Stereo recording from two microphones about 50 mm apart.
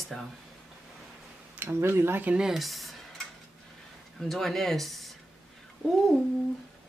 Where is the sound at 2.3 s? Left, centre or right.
Centre.